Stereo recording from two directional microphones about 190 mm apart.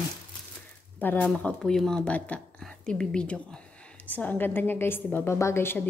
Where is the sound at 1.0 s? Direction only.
10° left (ahead or behind).